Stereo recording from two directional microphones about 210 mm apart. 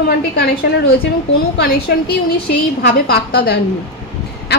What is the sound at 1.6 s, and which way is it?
A woman's voice, 50° left (ahead or behind).